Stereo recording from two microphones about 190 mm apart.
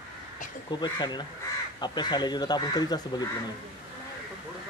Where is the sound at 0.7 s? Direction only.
25° left (ahead or behind).